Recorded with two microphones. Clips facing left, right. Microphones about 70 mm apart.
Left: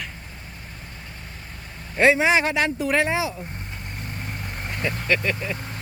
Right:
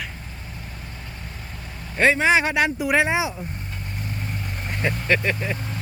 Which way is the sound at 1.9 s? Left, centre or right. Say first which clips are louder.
Even; centre.